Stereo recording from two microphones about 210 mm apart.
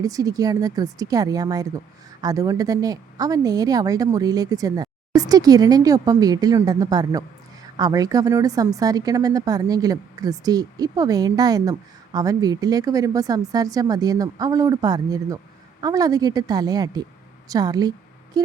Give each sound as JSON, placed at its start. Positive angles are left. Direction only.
{"t": 0.0, "sound": "a woman's voice", "side_deg": -15}